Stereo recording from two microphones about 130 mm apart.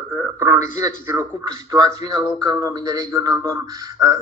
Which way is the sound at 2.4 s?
25° right (ahead or behind).